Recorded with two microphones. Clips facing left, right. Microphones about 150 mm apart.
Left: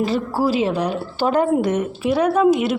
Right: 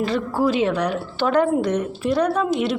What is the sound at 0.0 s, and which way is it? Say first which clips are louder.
Speech: left 1 dB; 5° left (ahead or behind).